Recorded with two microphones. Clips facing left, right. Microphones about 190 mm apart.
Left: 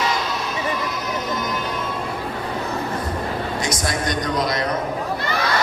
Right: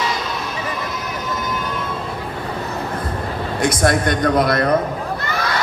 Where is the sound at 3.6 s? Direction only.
55° right (ahead or behind).